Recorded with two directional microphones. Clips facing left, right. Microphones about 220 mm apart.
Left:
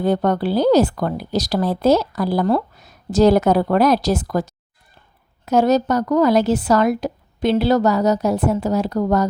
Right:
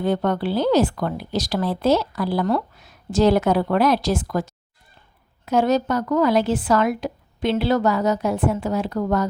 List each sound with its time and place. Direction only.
0.0 s a woman's voice: 40° left (ahead or behind)